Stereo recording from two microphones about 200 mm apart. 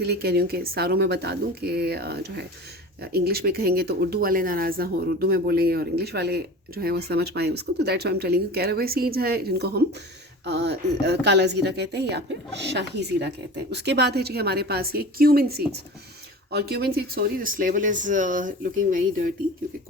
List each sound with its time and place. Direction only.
0.0 s speech: 55° right (ahead or behind)